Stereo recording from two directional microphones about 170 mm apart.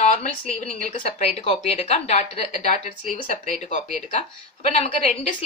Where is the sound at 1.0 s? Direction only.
35° left (ahead or behind).